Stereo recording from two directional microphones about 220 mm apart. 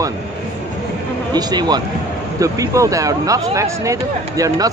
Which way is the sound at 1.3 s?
20° right (ahead or behind).